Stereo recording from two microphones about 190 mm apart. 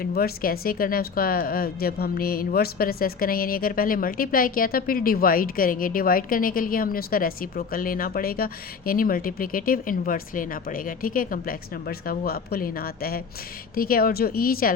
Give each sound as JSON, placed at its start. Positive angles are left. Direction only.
{"t": 0.0, "sound": "speech", "side_deg": 50}